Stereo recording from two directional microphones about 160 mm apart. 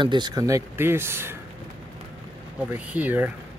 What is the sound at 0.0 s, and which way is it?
Speech, 30° right (ahead or behind).